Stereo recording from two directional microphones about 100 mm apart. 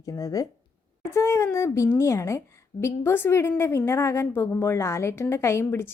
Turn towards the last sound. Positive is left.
turn(degrees=25)  # may be behind; listen again after turning